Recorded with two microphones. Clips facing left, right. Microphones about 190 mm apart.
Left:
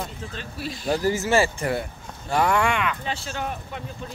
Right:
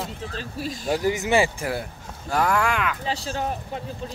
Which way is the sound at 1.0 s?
15° right (ahead or behind).